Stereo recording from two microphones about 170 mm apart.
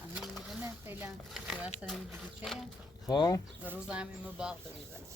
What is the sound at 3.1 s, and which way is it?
Speech, 25° left (ahead or behind).